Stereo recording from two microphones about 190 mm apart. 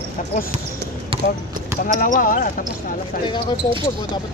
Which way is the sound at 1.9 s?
45° left (ahead or behind).